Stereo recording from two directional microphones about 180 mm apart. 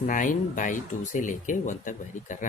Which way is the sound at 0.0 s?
45° left (ahead or behind).